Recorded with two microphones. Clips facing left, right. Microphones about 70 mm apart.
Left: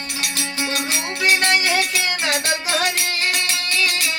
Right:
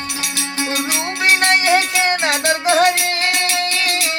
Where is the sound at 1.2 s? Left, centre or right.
Right.